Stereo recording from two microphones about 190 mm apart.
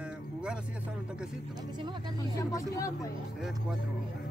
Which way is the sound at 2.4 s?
15° left (ahead or behind).